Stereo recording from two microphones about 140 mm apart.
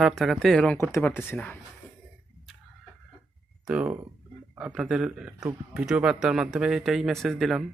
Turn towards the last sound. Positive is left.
turn(degrees=0)  # may be behind; listen again after turning